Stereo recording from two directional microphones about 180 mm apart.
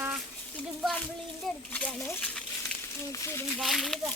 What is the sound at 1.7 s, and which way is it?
Speech, 10° left (ahead or behind).